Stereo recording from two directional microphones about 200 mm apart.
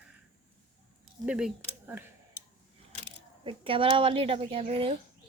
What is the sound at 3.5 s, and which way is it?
Speech, 25° right (ahead or behind).